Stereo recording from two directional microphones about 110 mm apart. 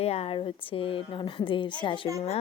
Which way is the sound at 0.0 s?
65° left (ahead or behind).